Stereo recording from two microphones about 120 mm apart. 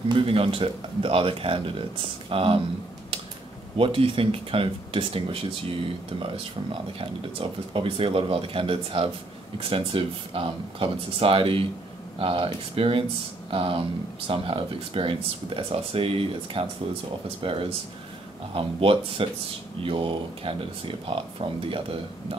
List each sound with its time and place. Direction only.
0.1 s speech: 50° right (ahead or behind)
3.7 s speech: 50° right (ahead or behind)